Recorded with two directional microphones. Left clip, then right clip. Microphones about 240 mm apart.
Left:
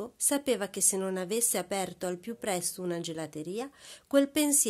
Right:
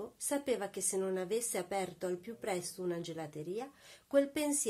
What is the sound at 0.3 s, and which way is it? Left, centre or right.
A woman's voice, left.